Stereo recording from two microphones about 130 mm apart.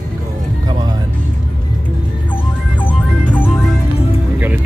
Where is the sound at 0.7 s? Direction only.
35° right (ahead or behind).